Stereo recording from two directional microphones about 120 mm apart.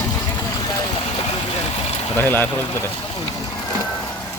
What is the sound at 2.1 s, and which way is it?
Speech, 15° left (ahead or behind).